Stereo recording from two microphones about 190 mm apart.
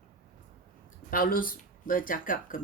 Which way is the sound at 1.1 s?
50° left (ahead or behind).